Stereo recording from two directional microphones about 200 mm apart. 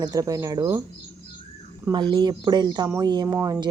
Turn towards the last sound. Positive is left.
turn(degrees=-20)  # may be behind; listen again after turning